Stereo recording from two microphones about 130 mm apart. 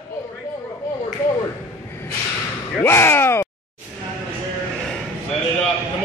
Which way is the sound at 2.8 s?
20° left (ahead or behind).